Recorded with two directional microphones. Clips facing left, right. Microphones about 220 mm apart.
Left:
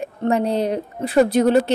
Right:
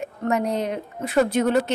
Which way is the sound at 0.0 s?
30° left (ahead or behind).